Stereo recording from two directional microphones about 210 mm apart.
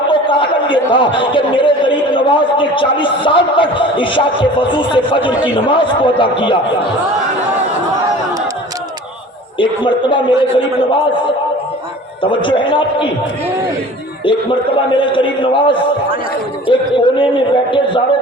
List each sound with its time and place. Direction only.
0.1 s speech: 25° left (ahead or behind)
9.6 s speech: 25° left (ahead or behind)
12.2 s speech: 25° left (ahead or behind)
14.3 s speech: 25° left (ahead or behind)